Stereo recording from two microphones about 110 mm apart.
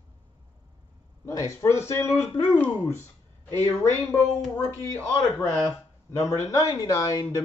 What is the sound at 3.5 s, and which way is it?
Speech, 25° left (ahead or behind).